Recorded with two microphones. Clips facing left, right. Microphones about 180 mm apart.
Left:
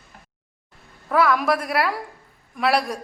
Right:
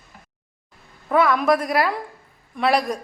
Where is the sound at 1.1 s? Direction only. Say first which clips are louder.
Right 2 dB; centre (ahead or behind).